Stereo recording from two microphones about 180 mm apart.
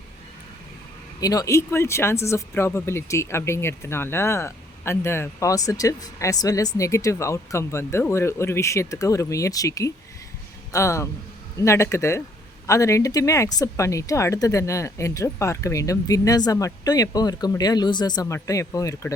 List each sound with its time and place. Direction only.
1.2 s a woman's voice: 20° left (ahead or behind)